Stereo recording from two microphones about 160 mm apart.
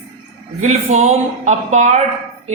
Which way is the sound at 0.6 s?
45° right (ahead or behind).